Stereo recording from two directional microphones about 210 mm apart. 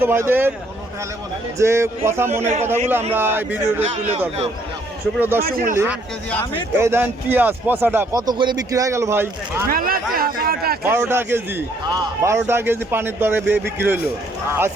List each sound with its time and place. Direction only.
0.0 s a man's voice: 10° right (ahead or behind)
1.5 s a man's voice: 15° right (ahead or behind)
2.4 s speech: 30° right (ahead or behind)
3.1 s a man's voice: 10° right (ahead or behind)
3.9 s speech: 30° right (ahead or behind)
5.4 s speech: 40° right (ahead or behind)
5.7 s a man's voice: 10° right (ahead or behind)
9.6 s speech: 45° right (ahead or behind)
10.8 s a man's voice: 10° right (ahead or behind)